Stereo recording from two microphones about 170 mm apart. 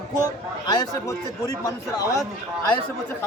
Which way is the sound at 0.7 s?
20° left (ahead or behind).